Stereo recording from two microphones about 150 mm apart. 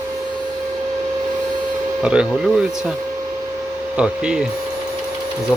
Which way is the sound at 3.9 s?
5° right (ahead or behind).